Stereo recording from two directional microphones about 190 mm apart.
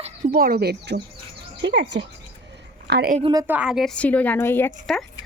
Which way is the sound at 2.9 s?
55° right (ahead or behind).